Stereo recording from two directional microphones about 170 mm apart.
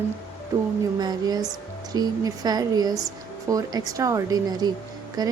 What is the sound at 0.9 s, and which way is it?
A woman's voice, 25° right (ahead or behind).